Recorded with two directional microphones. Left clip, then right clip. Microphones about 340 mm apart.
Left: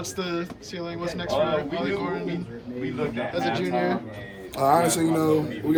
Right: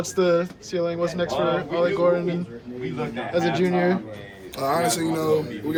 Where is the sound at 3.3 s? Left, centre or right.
Centre.